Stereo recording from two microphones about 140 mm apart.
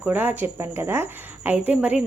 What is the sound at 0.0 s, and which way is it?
Speech, 10° right (ahead or behind).